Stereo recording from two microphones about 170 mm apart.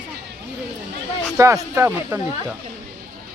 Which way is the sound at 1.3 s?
15° right (ahead or behind).